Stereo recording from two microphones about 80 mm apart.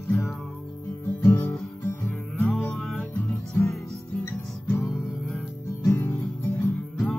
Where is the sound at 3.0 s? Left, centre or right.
Left.